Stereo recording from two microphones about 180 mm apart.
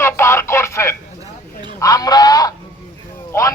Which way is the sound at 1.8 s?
20° left (ahead or behind).